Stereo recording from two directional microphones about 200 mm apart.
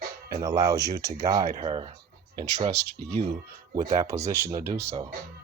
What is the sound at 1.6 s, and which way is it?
Speech, 25° right (ahead or behind).